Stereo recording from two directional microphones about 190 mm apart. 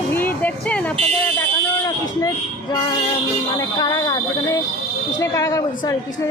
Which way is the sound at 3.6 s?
20° left (ahead or behind).